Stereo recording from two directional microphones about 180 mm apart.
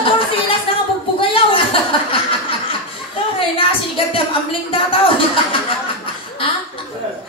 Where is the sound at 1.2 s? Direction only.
30° left (ahead or behind).